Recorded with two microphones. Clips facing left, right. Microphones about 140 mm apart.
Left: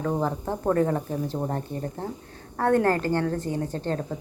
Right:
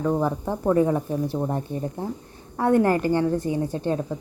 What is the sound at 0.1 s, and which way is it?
A woman's voice, 10° right (ahead or behind).